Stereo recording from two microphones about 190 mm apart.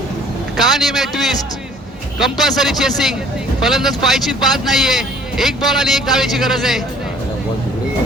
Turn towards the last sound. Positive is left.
turn(degrees=0)  # may be behind; listen again after turning